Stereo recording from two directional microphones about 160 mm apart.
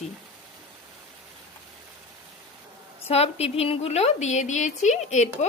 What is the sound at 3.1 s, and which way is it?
Speech, 40° left (ahead or behind).